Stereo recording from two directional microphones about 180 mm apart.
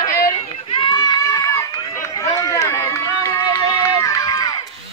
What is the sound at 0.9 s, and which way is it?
Run, 20° left (ahead or behind).